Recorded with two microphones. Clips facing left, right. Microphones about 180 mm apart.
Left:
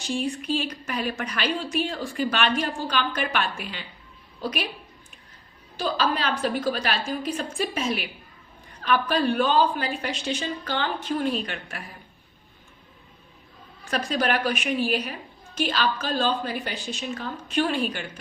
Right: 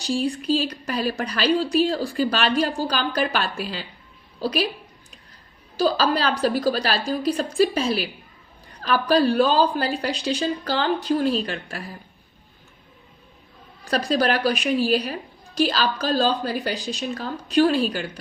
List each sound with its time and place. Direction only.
0.0 s a woman's voice: 35° right (ahead or behind)
5.7 s a woman's voice: 35° right (ahead or behind)
13.8 s a woman's voice: 35° right (ahead or behind)